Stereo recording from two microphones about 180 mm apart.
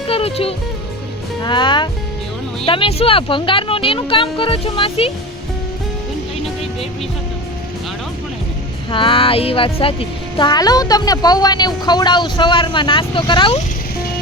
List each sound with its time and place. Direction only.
0.1 s speech: 30° left (ahead or behind)
8.9 s speech: 30° left (ahead or behind)